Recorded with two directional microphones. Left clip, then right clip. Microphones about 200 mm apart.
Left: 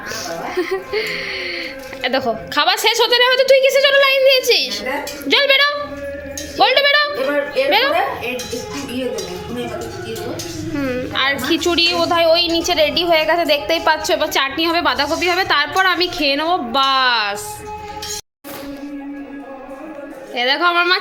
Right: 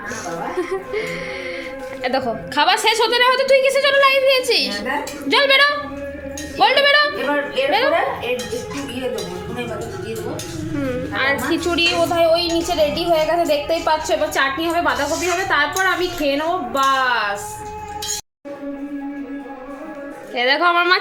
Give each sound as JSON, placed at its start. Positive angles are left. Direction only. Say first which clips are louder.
{"t": 0.5, "sound": "a woman's voice", "louder": "left 5 dB", "side_deg": 10}
{"t": 10.8, "sound": "a woman's voice", "louder": "left 2 dB", "side_deg": 10}
{"t": 20.3, "sound": "a woman's voice", "louder": "even", "side_deg": 0}